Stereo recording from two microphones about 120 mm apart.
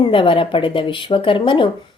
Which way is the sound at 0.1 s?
45° left (ahead or behind).